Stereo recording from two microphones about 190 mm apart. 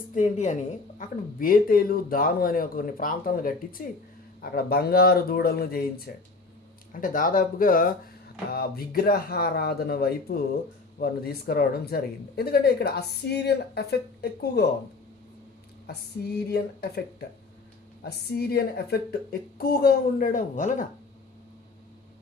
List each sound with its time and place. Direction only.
0.1 s speech: 40° left (ahead or behind); by 14.6 s 60° left (ahead or behind)
15.9 s speech: 55° left (ahead or behind)